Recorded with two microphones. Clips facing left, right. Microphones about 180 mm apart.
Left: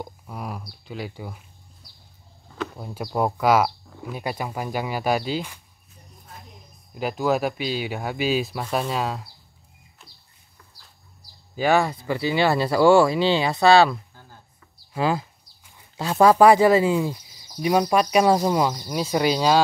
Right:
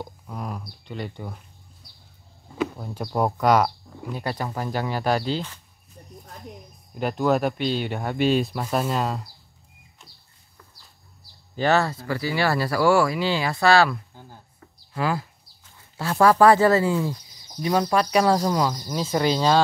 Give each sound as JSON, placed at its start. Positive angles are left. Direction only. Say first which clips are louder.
{"t": 0.0, "sound": "a sound", "louder": "even", "side_deg": 10}
{"t": 0.8, "sound": "speech", "louder": "even", "side_deg": 5}
{"t": 2.8, "sound": "speech", "louder": "left 3 dB", "side_deg": 5}
{"t": 6.9, "sound": "speech", "louder": "right 1 dB", "side_deg": 5}
{"t": 10.0, "sound": "bird", "louder": "even", "side_deg": 0}
{"t": 11.5, "sound": "speech", "louder": "left 1 dB", "side_deg": 10}
{"t": 14.2, "sound": "a sound", "louder": "right 4 dB", "side_deg": -20}
{"t": 15.0, "sound": "speech", "louder": "left 2 dB", "side_deg": 20}